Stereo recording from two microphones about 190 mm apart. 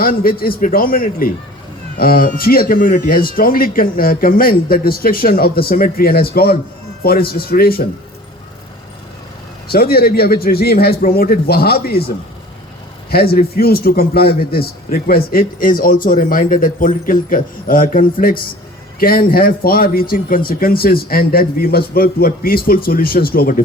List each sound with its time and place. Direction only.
0.0 s a man's voice: 50° left (ahead or behind)
9.7 s a man's voice: 55° left (ahead or behind)